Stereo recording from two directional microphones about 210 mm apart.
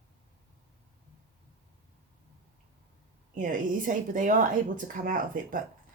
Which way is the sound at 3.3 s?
40° right (ahead or behind).